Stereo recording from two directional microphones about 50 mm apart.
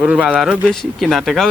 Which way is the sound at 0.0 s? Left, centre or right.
Right.